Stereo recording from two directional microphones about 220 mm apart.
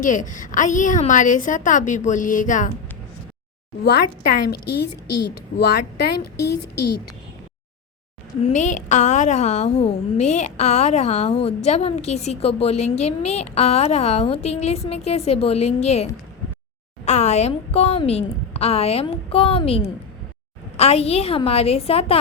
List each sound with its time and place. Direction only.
0.0 s a woman's voice: 35° left (ahead or behind)
3.8 s a woman's voice: 45° left (ahead or behind)
8.4 s a woman's voice: 35° left (ahead or behind)
17.1 s a woman's voice: 30° left (ahead or behind)